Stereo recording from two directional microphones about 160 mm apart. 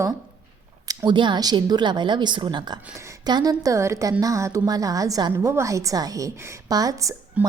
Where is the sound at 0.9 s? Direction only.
30° right (ahead or behind).